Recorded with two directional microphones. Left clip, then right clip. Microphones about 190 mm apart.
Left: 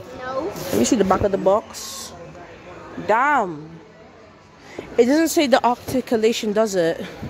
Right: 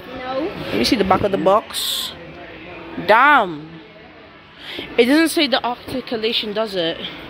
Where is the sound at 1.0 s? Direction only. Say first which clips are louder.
Right 3 dB; 15° left (ahead or behind).